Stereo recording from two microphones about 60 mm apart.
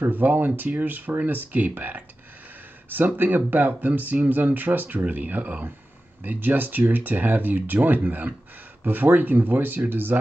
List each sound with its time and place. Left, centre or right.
0.0 s speech: right